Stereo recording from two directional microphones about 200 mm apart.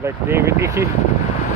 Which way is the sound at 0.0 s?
15° right (ahead or behind).